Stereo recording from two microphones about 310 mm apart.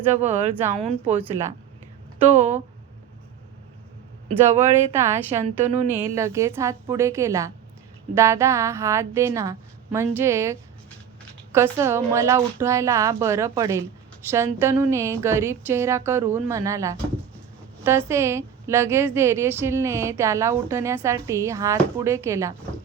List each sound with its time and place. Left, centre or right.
0.2 s speech: right
1.1 s a woman's voice: centre
2.3 s speech: right
4.6 s a woman's voice: centre